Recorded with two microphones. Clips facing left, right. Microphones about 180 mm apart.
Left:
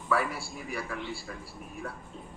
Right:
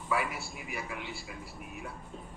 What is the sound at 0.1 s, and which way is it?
Speech, 15° right (ahead or behind).